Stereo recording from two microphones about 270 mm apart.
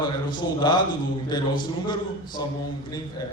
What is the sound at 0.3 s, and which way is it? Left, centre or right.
A man's voice, centre.